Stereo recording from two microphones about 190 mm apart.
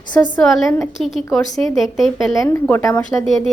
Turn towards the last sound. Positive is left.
turn(degrees=15)  # may be behind; listen again after turning